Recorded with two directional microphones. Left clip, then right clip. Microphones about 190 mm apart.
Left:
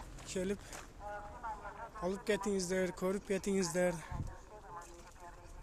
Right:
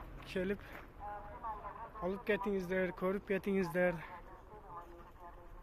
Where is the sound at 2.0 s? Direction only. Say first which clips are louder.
Even; 30° left (ahead or behind).